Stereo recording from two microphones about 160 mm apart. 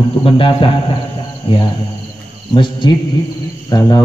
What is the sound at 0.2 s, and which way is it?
A man's voice, 35° left (ahead or behind).